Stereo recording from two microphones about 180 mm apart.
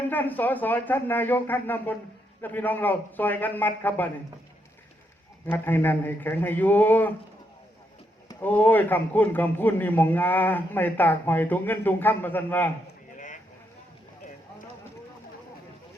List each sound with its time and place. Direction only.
0.1 s a man's voice: 10° left (ahead or behind)
5.5 s a man's voice: 10° left (ahead or behind)
8.3 s a man's voice: 10° left (ahead or behind)
13.1 s vehicle: 45° left (ahead or behind)